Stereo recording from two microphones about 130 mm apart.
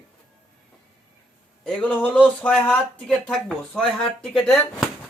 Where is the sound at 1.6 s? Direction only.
10° left (ahead or behind).